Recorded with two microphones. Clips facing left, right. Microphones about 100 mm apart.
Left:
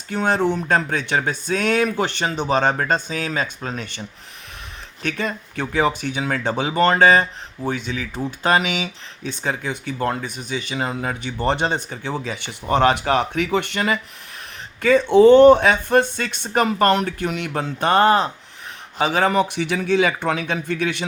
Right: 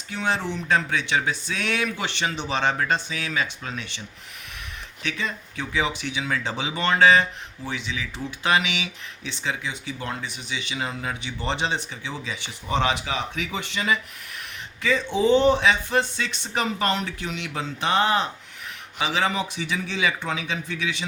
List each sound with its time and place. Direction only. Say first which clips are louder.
0.1 s speech: left 7 dB; 50° left (ahead or behind)
5.0 s a man's voice: left 5 dB; 50° left (ahead or behind)